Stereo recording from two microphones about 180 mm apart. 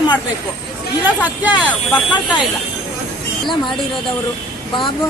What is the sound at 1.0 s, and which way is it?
Speech, 10° right (ahead or behind).